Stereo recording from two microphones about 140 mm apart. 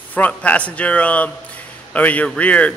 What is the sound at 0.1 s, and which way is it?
A man's voice, 10° left (ahead or behind).